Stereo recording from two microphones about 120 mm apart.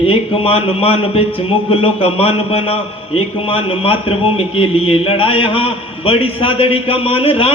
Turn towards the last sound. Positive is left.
turn(degrees=50)  # may be behind; listen again after turning